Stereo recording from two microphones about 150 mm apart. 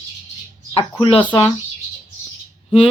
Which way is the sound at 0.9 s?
35° left (ahead or behind).